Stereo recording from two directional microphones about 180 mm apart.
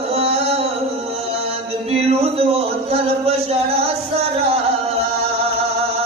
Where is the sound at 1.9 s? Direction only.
35° right (ahead or behind).